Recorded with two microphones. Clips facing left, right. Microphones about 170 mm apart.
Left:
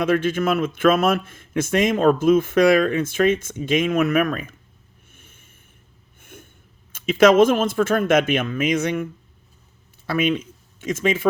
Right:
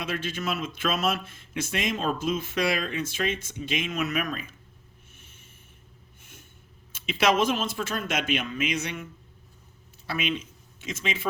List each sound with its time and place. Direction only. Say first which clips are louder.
0.0 s a man's voice: left 12 dB; 50° left (ahead or behind)
5.1 s a sound: left 5 dB; 50° left (ahead or behind)
6.9 s a man's voice: left 10 dB; 50° left (ahead or behind)
10.1 s speech: left 9 dB; 50° left (ahead or behind)